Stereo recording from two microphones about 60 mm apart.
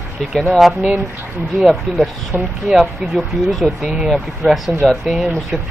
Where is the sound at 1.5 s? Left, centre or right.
Centre.